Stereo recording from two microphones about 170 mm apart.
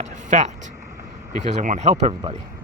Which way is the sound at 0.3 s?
40° right (ahead or behind).